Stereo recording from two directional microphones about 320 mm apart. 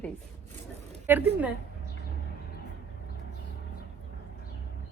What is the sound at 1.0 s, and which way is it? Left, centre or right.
Speech, centre.